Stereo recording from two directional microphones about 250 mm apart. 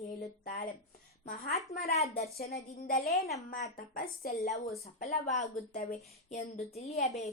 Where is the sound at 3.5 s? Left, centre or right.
Left.